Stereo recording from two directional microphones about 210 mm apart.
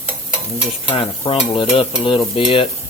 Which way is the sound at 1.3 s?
25° left (ahead or behind).